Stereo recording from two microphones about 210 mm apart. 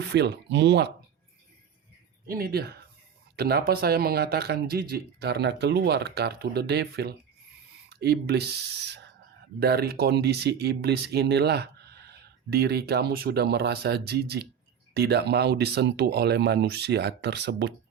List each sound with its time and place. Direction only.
0.0 s speech: 55° right (ahead or behind)
2.2 s speech: 45° right (ahead or behind)
9.6 s speech: 50° right (ahead or behind)